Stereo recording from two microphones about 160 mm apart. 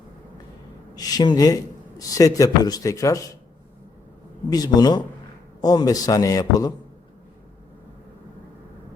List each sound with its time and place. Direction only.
0.9 s a man's voice: 25° left (ahead or behind)
4.4 s a man's voice: 25° left (ahead or behind)